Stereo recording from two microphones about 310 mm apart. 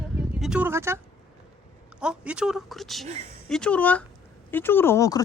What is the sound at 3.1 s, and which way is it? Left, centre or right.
Speech, centre.